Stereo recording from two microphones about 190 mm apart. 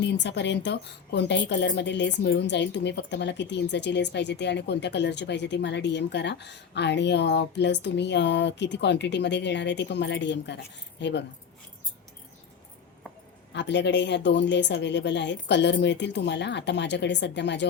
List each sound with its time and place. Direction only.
0.0 s a woman's voice: 65° left (ahead or behind)
13.5 s a woman's voice: 65° left (ahead or behind)